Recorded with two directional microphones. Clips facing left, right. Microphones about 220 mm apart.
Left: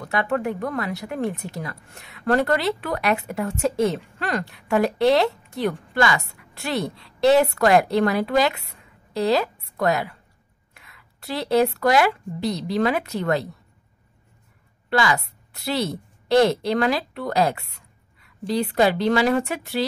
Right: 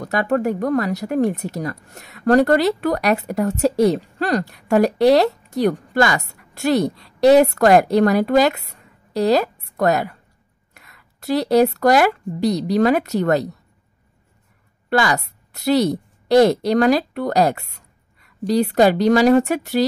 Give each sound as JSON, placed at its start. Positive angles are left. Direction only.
{"t": 0.0, "sound": "a woman's voice", "side_deg": -40}
{"t": 14.9, "sound": "a woman's voice", "side_deg": -45}